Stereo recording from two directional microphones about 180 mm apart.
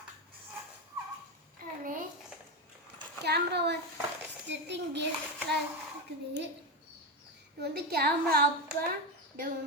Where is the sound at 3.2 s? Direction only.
65° right (ahead or behind).